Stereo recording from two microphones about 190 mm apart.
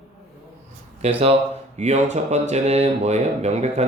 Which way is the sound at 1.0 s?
30° right (ahead or behind).